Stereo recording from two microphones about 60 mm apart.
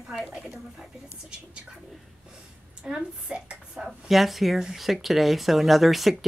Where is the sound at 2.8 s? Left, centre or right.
Centre.